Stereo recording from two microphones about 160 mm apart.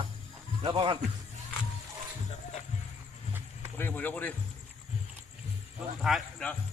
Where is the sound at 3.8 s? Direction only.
10° left (ahead or behind).